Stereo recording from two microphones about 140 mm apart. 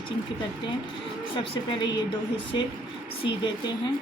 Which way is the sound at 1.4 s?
35° left (ahead or behind).